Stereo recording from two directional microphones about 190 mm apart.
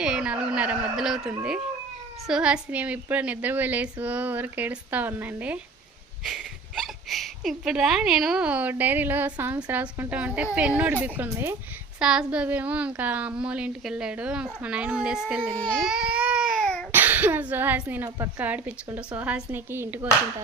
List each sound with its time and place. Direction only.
0.0 s a woman's voice: 5° right (ahead or behind)
15.6 s baby cry: centre (ahead or behind)
16.9 s speech: 10° right (ahead or behind)